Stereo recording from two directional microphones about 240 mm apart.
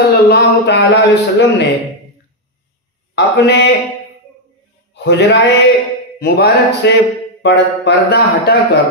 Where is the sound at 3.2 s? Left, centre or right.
Left.